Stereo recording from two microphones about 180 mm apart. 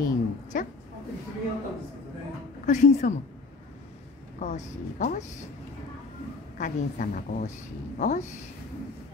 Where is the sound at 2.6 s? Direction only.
40° left (ahead or behind).